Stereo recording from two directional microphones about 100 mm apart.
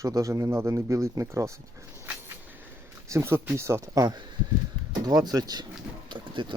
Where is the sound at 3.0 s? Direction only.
25° right (ahead or behind).